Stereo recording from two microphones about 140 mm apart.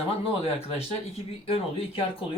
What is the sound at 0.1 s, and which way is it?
Speech, 45° left (ahead or behind).